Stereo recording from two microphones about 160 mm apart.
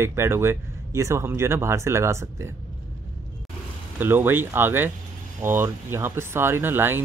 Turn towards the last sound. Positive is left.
turn(degrees=-15)  # may be behind; listen again after turning